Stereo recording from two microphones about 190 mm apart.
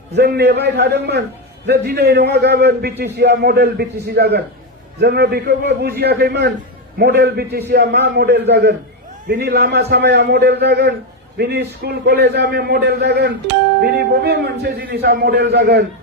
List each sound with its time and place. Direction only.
0.1 s a man's voice: 60° right (ahead or behind)